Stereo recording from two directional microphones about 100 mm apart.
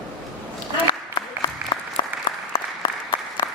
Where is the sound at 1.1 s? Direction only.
50° left (ahead or behind).